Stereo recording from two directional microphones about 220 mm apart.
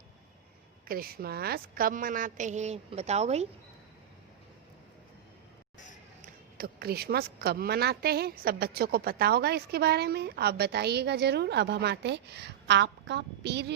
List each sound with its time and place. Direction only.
0.9 s a woman's voice: 45° right (ahead or behind)
6.2 s a woman's voice: 45° right (ahead or behind)